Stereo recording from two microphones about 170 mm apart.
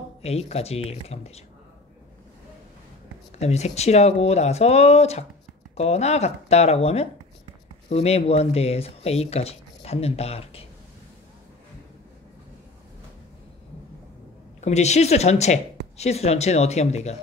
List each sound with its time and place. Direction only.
0.2 s speech: 35° left (ahead or behind)
3.3 s speech: 40° left (ahead or behind)
14.6 s speech: 40° left (ahead or behind)